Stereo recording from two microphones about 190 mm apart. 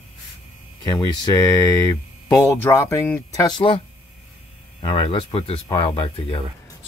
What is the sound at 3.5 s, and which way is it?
Speech, 25° left (ahead or behind).